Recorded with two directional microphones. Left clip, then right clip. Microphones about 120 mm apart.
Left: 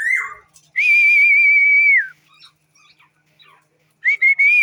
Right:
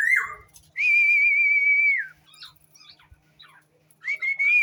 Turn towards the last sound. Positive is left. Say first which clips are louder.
# left 10 dB
turn(degrees=15)  # may be behind; listen again after turning